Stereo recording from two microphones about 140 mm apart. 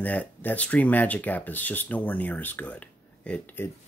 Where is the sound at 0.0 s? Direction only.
10° left (ahead or behind).